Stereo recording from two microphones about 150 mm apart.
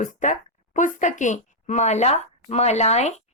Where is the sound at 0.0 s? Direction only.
55° left (ahead or behind).